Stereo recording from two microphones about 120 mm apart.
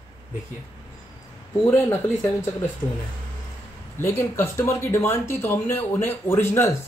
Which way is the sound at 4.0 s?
20° left (ahead or behind).